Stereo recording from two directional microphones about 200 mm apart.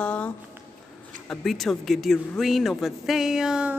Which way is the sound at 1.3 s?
Centre (ahead or behind).